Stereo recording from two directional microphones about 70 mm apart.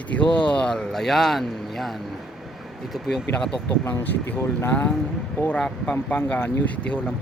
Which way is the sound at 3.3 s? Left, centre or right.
Centre.